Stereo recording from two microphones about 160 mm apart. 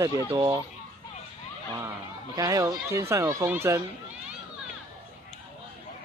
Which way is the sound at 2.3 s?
20° right (ahead or behind).